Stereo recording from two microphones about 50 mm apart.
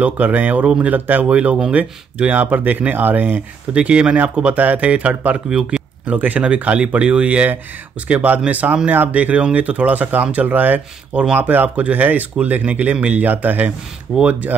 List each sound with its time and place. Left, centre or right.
0.0 s speech: right
5.5 s speech: centre
6.0 s speech: right
14.1 s speech: centre